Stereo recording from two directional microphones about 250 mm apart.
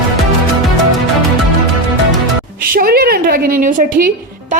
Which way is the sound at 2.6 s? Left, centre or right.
Right.